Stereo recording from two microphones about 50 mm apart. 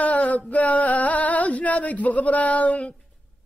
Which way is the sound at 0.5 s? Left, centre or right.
Left.